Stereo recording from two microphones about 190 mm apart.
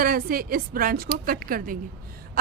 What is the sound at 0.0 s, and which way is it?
A woman's voice, 50° right (ahead or behind).